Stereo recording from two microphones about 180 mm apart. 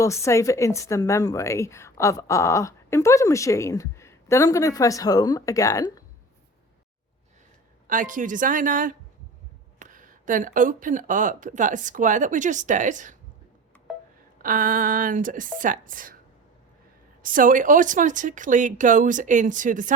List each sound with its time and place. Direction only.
0.0 s a woman's voice: 15° left (ahead or behind)
7.9 s speech: 45° right (ahead or behind)
14.4 s speech: 50° right (ahead or behind)
17.2 s speech: 50° right (ahead or behind)